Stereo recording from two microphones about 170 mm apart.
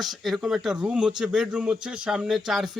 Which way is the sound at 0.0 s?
Centre (ahead or behind).